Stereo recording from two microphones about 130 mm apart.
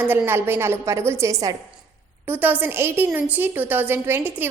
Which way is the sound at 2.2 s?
15° right (ahead or behind).